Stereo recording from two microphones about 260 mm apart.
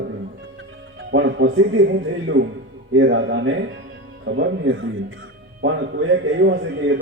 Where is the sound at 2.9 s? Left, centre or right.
Right.